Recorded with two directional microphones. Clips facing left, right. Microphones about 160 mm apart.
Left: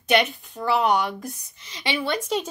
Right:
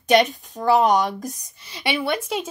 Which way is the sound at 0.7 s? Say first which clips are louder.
Right 4 dB; 40° right (ahead or behind).